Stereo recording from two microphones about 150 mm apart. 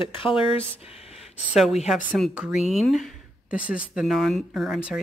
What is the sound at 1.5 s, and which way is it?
Speech, centre (ahead or behind).